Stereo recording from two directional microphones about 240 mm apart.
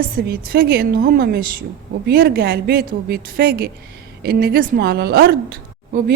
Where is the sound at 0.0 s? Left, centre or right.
Right.